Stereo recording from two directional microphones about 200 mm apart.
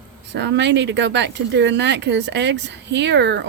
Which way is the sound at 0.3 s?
60° right (ahead or behind).